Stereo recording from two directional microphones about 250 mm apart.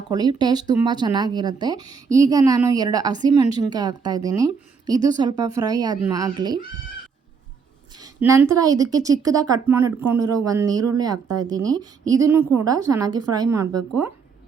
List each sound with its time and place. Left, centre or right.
0.1 s speech: centre
7.9 s speech: centre